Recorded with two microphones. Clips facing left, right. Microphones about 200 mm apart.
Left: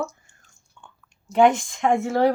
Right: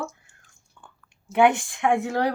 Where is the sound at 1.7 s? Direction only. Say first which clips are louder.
Left 1 dB; 40° left (ahead or behind).